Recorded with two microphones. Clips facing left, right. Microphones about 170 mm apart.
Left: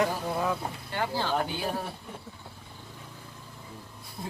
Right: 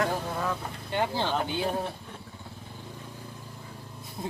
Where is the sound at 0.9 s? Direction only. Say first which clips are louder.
Right 3 dB; 20° right (ahead or behind).